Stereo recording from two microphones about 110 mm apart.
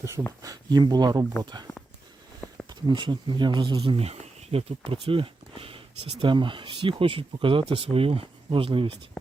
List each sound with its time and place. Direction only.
0.4 s speech: 35° right (ahead or behind)
2.6 s speech: 45° right (ahead or behind)
3.9 s speech: 70° right (ahead or behind)